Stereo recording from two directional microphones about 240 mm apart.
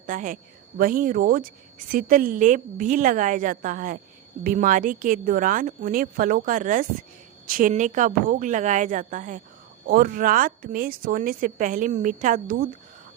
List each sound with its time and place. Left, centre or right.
0.0 s speech: right